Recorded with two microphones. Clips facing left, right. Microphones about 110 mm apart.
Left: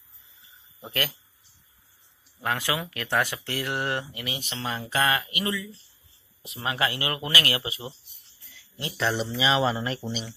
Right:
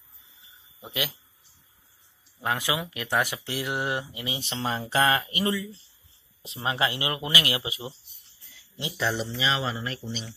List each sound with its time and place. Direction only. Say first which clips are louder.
0.7 s speech: left 1 dB; 10° right (ahead or behind)
2.4 s speech: even; 15° right (ahead or behind)
8.4 s jingle bell: even; 20° right (ahead or behind)
8.9 s speech: left 1 dB; centre (ahead or behind)
9.3 s speech: left 4 dB; 15° left (ahead or behind)
9.7 s speech: left 5 dB; 30° left (ahead or behind)